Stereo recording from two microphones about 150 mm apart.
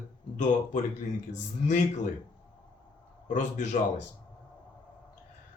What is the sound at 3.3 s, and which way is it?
Speech, 55° left (ahead or behind).